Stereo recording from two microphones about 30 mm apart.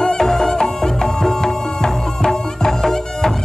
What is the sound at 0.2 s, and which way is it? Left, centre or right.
Music, centre.